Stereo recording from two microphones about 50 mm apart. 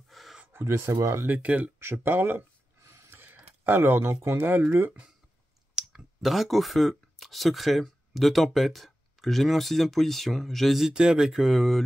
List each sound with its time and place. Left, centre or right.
0.1 s a sound: centre
0.5 s speech: right
1.2 s speech: right
1.8 s speech: right
3.1 s a sound: right
4.4 s speech: right
5.8 s clicking: centre
6.3 s speech: centre
10.8 s speech: centre